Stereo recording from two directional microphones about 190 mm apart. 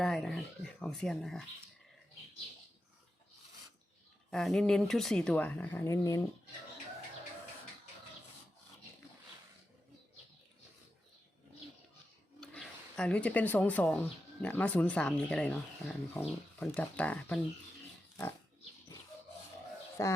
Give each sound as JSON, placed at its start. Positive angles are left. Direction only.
{"t": 0.0, "sound": "speech", "side_deg": 0}
{"t": 4.3, "sound": "speech", "side_deg": 5}
{"t": 12.4, "sound": "speech", "side_deg": 5}
{"t": 20.0, "sound": "speech", "side_deg": 15}